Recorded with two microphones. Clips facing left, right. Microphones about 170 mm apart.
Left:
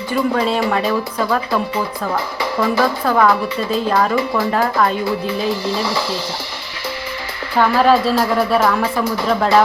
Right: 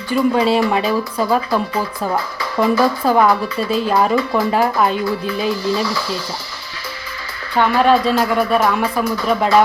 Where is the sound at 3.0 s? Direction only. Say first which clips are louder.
Right 1 dB; 20° right (ahead or behind).